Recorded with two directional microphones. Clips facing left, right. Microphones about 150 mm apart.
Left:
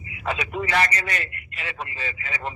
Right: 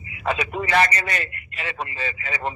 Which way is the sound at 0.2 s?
35° right (ahead or behind).